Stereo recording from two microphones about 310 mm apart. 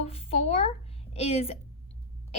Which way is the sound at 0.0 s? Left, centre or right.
Centre.